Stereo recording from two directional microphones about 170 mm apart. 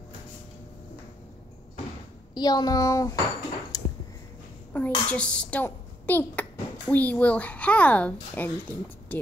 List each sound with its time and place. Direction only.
2.3 s speech: 25° left (ahead or behind)
3.7 s a sound: 20° left (ahead or behind)
4.7 s speech: 10° left (ahead or behind)